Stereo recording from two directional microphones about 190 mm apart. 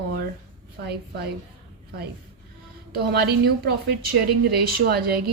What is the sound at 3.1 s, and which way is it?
A woman's voice, 55° right (ahead or behind).